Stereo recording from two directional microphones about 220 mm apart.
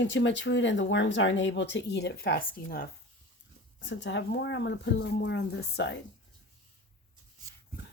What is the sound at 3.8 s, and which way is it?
A woman's voice, 55° left (ahead or behind).